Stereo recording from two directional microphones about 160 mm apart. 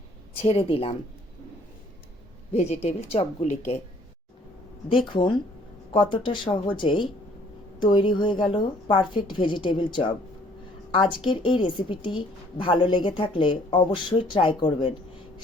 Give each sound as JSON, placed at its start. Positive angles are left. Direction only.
{"t": 0.4, "sound": "a woman's voice", "side_deg": 35}
{"t": 2.5, "sound": "a woman's voice", "side_deg": 40}
{"t": 5.0, "sound": "a woman's voice", "side_deg": 30}